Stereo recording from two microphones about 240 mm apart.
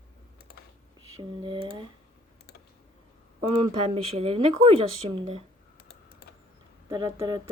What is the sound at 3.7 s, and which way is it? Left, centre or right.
Speech, right.